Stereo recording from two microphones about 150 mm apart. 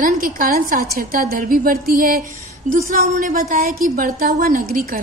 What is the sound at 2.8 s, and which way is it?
A woman's voice, 60° right (ahead or behind).